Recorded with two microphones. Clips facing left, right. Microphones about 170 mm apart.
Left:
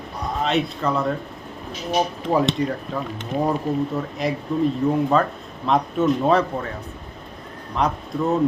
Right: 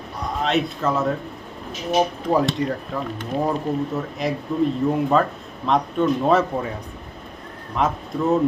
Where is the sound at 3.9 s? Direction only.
Centre (ahead or behind).